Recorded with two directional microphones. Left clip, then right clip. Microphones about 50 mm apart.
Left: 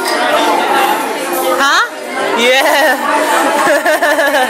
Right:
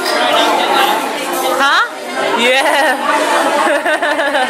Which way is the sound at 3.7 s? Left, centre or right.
Left.